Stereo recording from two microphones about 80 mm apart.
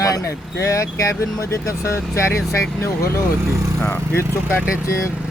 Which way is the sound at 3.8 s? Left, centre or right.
Left.